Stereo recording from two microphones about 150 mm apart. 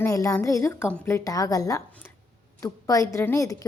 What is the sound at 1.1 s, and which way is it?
Speech, 25° left (ahead or behind).